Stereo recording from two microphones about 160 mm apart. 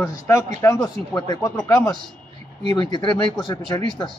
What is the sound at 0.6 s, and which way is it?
A man's voice, 15° left (ahead or behind).